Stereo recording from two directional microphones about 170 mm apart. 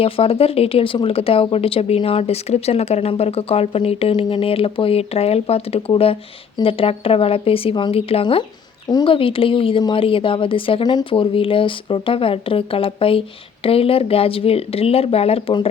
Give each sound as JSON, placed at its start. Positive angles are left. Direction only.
{"t": 0.0, "sound": "speech", "side_deg": 35}